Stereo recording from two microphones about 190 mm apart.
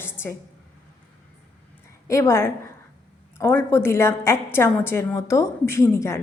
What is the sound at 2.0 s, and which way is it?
A woman's voice, 15° left (ahead or behind).